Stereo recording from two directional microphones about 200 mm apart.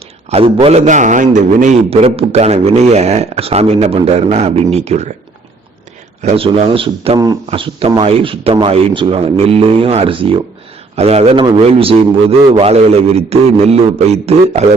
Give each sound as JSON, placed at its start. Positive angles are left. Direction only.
{"t": 0.3, "sound": "a man's voice", "side_deg": -30}
{"t": 6.2, "sound": "a man's voice", "side_deg": -30}